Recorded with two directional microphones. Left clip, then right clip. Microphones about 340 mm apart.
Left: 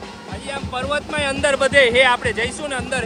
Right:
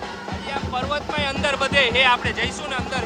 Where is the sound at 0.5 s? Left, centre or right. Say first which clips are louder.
Left 2 dB; left.